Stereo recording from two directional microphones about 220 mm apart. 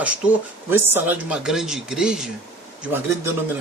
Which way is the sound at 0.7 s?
10° right (ahead or behind).